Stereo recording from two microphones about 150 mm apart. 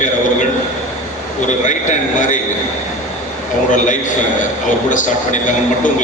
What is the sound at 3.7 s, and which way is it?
A man's voice, 55° left (ahead or behind).